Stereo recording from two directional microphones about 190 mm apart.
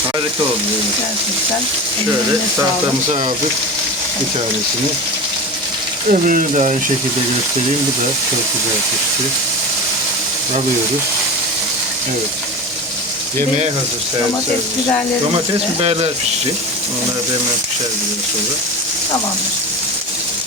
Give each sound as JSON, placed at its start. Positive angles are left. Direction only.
{"t": 6.1, "sound": "speech", "side_deg": -45}
{"t": 15.8, "sound": "speech", "side_deg": -30}